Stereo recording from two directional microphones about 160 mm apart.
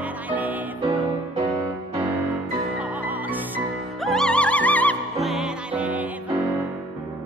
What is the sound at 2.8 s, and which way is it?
Music, 10° right (ahead or behind).